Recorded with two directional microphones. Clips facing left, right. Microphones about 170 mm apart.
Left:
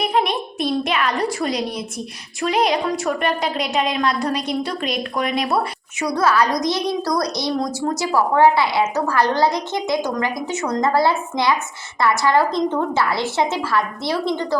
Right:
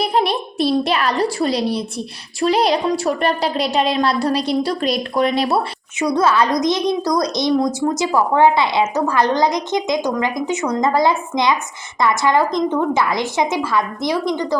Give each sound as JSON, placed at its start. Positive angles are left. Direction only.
{"t": 0.0, "sound": "a child's voice", "side_deg": -35}